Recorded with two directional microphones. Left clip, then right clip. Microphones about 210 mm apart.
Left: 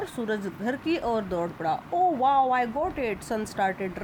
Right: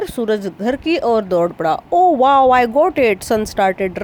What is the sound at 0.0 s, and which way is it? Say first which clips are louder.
Speech: right 11 dB; 40° right (ahead or behind).